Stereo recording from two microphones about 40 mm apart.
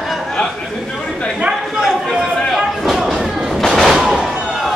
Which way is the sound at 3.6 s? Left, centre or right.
Centre.